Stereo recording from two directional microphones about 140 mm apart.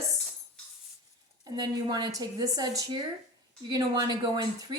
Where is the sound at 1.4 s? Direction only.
30° right (ahead or behind).